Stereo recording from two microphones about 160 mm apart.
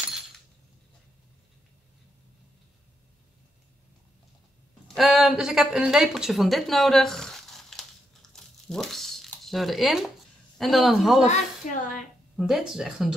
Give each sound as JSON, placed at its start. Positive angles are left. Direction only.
{"t": 4.8, "sound": "speech", "side_deg": 0}
{"t": 8.3, "sound": "a sound", "side_deg": 0}
{"t": 10.6, "sound": "speech", "side_deg": 0}
{"t": 11.2, "sound": "a woman's voice", "side_deg": 55}
{"t": 12.4, "sound": "speech", "side_deg": 0}